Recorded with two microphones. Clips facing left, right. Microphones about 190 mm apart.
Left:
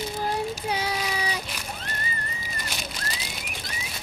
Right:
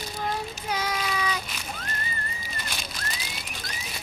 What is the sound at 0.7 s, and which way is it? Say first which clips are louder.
Child singing: left 1 dB; 30° left (ahead or behind).